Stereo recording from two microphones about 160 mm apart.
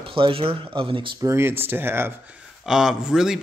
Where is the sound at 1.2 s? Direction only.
15° right (ahead or behind).